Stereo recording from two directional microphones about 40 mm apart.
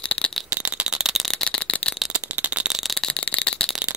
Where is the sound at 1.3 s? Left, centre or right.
Left.